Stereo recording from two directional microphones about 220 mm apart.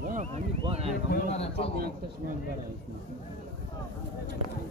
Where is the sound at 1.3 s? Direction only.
25° left (ahead or behind).